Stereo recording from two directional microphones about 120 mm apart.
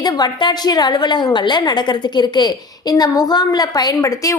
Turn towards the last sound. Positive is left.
turn(degrees=30)  # may be behind; listen again after turning